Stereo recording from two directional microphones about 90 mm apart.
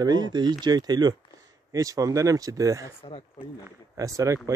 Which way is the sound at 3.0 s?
90° left.